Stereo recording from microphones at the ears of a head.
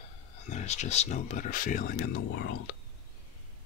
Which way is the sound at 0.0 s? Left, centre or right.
Left.